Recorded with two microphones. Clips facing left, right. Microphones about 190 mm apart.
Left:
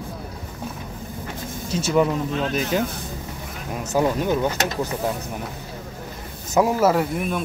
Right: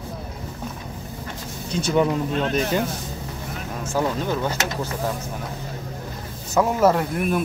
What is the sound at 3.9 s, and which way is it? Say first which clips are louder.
Speech: left 3 dB; 15° left (ahead or behind).